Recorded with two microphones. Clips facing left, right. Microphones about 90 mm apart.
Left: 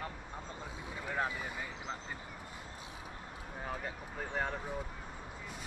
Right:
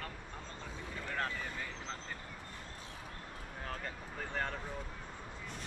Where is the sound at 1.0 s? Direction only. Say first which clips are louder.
Left 3 dB; 15° left (ahead or behind).